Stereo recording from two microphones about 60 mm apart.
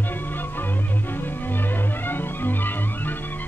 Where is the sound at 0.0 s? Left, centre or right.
Left.